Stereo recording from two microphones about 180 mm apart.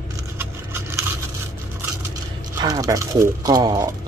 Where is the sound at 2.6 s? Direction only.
20° right (ahead or behind).